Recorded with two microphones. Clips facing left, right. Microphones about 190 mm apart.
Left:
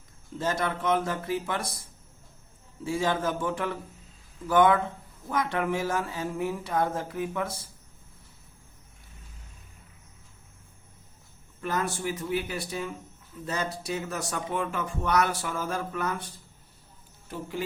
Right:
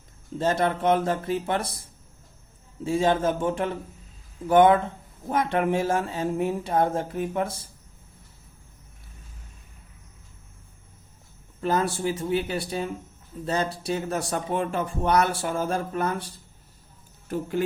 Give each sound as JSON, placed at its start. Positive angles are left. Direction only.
{"t": 0.6, "sound": "speech", "side_deg": -30}
{"t": 1.5, "sound": "speech", "side_deg": -60}
{"t": 2.8, "sound": "speech", "side_deg": -30}
{"t": 11.6, "sound": "speech", "side_deg": -30}
{"t": 17.2, "sound": "speech", "side_deg": -50}